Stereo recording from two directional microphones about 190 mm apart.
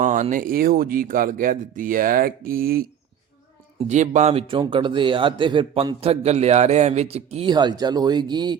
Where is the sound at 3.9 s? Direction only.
40° right (ahead or behind).